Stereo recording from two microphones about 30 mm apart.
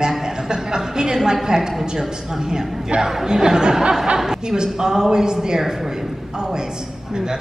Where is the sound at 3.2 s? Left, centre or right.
Right.